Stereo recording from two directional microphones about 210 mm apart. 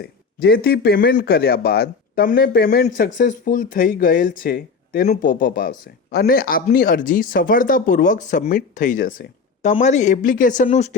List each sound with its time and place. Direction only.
0.0 s speech: 50° left (ahead or behind); by 10.9 s 35° left (ahead or behind)